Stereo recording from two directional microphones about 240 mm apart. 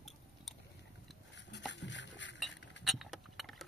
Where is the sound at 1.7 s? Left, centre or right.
Left.